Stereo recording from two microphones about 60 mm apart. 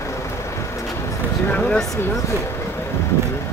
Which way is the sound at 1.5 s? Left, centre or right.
Left.